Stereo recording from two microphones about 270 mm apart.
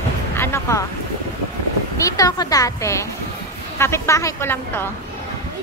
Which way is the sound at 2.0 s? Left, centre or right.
Centre.